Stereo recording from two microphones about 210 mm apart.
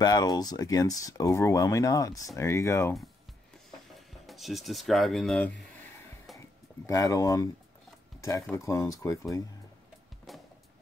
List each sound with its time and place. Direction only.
0.0 s speech: 20° left (ahead or behind)
3.9 s speech: centre (ahead or behind)
6.9 s speech: 15° left (ahead or behind)